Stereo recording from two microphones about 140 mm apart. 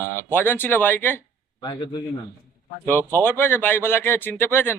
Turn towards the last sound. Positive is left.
turn(degrees=15)  # may be behind; listen again after turning